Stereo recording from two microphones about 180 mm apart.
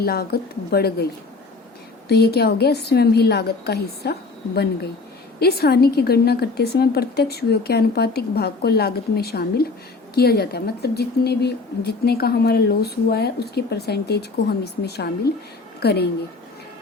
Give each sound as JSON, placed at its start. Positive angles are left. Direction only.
{"t": 0.0, "sound": "a woman's voice", "side_deg": 60}
{"t": 2.0, "sound": "a woman's voice", "side_deg": 65}